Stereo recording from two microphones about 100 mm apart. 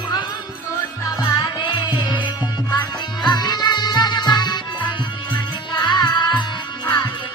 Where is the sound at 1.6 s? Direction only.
50° left (ahead or behind).